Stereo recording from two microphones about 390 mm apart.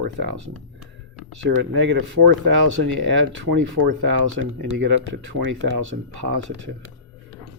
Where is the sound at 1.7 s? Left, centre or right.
Right.